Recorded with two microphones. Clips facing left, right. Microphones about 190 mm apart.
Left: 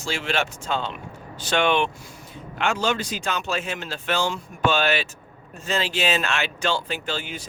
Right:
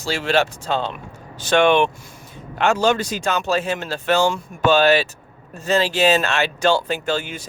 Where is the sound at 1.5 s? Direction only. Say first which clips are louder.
Right 6 dB; 50° right (ahead or behind).